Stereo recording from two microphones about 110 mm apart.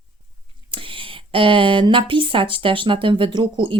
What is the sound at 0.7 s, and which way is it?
A woman's voice, 50° right (ahead or behind).